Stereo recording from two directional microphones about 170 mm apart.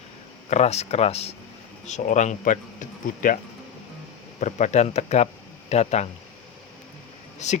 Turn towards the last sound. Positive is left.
turn(degrees=40)  # may be behind; listen again after turning